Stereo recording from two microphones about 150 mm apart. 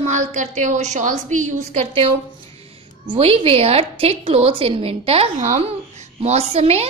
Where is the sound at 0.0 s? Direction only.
55° right (ahead or behind).